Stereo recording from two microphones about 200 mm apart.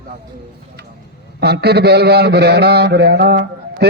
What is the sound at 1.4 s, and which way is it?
A man's voice, 55° right (ahead or behind).